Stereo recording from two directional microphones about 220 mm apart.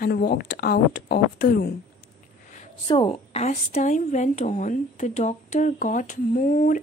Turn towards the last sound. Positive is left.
turn(degrees=40)  # may be behind; listen again after turning